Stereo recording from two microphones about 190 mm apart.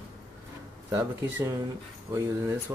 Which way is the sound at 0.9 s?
15° right (ahead or behind).